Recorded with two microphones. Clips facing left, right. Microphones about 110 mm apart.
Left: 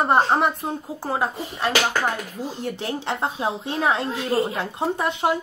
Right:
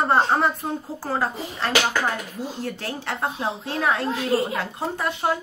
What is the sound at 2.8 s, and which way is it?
A woman's voice, 20° left (ahead or behind).